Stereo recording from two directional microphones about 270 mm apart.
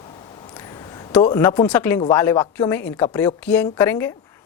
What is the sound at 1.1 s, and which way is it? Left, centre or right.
Speech, centre.